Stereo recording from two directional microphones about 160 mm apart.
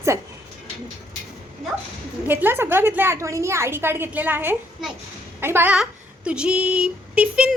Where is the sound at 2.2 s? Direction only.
10° right (ahead or behind).